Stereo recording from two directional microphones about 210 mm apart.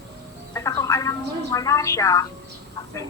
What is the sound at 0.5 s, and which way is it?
A woman's voice, 15° left (ahead or behind).